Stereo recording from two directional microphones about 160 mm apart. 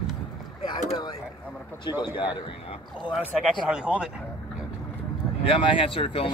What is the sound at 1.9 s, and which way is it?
Speech, 30° left (ahead or behind).